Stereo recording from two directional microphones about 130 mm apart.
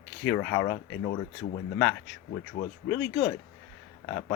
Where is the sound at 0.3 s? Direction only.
15° left (ahead or behind).